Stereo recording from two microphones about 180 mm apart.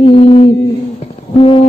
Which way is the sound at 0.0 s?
30° left (ahead or behind).